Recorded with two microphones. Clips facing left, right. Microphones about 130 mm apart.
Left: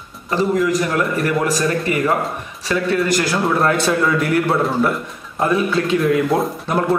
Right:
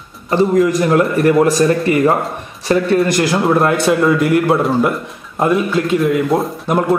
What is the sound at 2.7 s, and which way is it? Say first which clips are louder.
Speech: right 6 dB; 35° right (ahead or behind).